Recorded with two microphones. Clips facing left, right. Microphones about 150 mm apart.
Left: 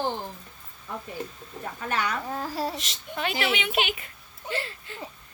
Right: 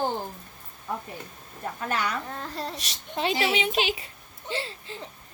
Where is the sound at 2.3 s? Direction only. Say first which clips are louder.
Left 4 dB; 5° left (ahead or behind).